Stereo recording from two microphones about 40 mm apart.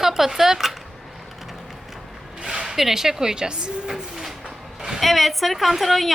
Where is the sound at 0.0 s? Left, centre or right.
Centre.